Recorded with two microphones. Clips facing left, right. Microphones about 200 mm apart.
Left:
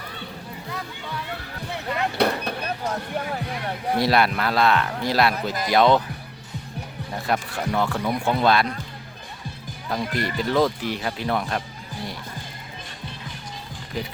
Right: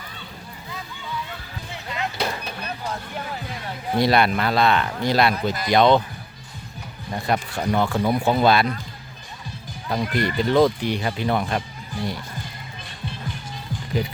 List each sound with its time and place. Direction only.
1.3 s a sound: 60° left (ahead or behind)
4.0 s speech: centre (ahead or behind)
7.3 s speech: centre (ahead or behind)
9.9 s speech: centre (ahead or behind)